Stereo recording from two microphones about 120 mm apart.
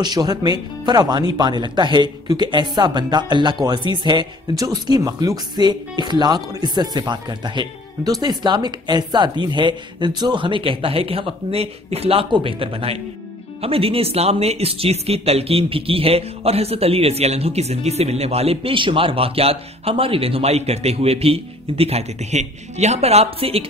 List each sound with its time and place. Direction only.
0.0 s speech: 35° right (ahead or behind); by 23.6 s 55° right (ahead or behind)